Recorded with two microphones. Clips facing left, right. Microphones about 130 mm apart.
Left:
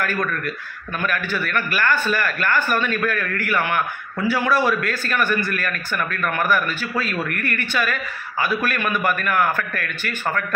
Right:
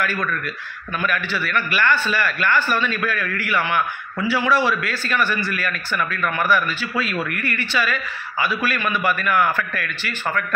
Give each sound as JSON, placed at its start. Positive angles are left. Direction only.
{"t": 0.0, "sound": "a man's voice", "side_deg": 45}